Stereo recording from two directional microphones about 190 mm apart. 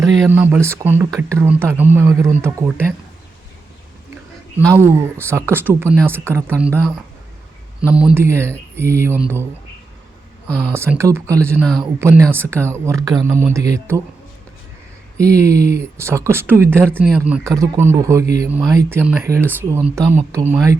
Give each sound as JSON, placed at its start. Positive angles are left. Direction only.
{"t": 0.0, "sound": "speech", "side_deg": -15}
{"t": 4.1, "sound": "a sound", "side_deg": -15}
{"t": 5.3, "sound": "speech", "side_deg": -15}
{"t": 7.9, "sound": "speech", "side_deg": -5}
{"t": 10.7, "sound": "speech", "side_deg": -15}
{"t": 15.2, "sound": "speech", "side_deg": -15}